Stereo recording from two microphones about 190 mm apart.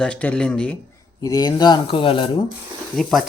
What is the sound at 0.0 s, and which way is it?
Speech, 5° left (ahead or behind).